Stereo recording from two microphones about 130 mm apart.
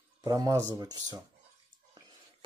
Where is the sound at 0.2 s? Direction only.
30° right (ahead or behind).